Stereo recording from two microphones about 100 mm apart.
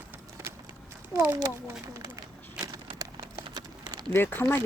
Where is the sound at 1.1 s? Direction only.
30° right (ahead or behind).